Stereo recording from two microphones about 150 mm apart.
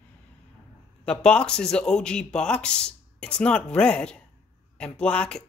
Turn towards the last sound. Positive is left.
turn(degrees=10)  # may be behind; listen again after turning